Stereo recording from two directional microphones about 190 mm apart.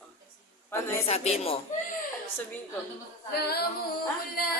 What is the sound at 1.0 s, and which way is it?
Speech, 35° left (ahead or behind).